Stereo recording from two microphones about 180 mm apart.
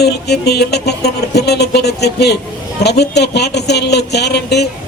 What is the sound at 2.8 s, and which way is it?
Speech, 65° left (ahead or behind).